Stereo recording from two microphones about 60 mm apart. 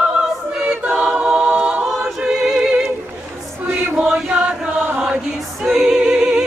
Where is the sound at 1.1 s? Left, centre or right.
Centre.